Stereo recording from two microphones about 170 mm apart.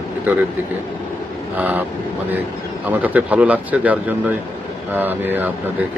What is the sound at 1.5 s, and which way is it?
Speech, 10° right (ahead or behind).